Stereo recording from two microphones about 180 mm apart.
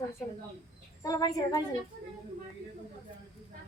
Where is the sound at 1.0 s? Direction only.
20° left (ahead or behind).